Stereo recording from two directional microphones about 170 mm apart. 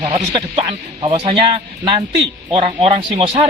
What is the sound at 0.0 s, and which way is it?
A man's voice, 30° right (ahead or behind).